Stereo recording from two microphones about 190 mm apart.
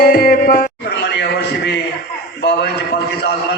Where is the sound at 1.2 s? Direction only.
60° left (ahead or behind).